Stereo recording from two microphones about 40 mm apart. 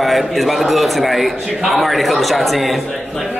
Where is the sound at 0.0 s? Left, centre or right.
Centre.